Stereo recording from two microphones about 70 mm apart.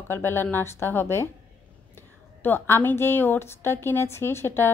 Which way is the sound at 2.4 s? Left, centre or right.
Left.